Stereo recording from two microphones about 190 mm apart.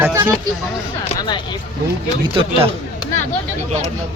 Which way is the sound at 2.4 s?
30° right (ahead or behind).